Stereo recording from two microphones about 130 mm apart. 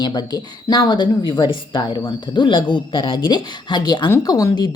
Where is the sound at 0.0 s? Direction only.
35° left (ahead or behind).